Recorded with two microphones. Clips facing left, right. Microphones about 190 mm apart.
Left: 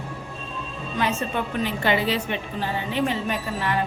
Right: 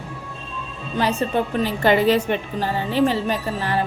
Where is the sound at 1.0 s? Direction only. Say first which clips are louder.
Right 5 dB; 35° right (ahead or behind).